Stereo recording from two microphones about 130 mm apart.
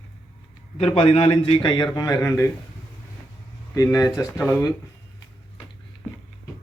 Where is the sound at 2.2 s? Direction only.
15° left (ahead or behind).